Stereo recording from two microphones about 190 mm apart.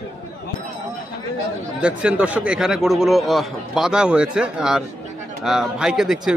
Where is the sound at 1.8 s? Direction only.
5° right (ahead or behind).